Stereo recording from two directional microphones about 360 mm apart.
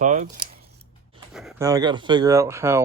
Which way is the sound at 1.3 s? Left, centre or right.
Centre.